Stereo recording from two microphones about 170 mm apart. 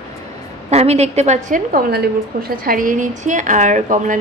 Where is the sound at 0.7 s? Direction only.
40° right (ahead or behind).